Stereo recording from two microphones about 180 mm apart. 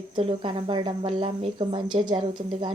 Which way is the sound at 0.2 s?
30° right (ahead or behind).